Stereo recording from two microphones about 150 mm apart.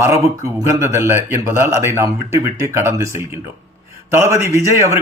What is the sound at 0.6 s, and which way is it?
A man's voice, 20° right (ahead or behind).